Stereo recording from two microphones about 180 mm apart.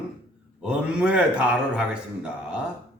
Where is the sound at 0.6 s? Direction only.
5° right (ahead or behind).